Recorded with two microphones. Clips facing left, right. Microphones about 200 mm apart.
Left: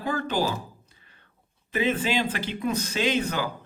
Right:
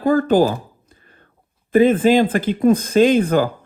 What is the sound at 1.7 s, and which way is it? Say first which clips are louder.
Speech: right 13 dB; 50° right (ahead or behind).